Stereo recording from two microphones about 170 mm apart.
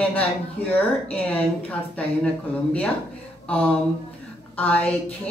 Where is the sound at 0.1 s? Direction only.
10° left (ahead or behind).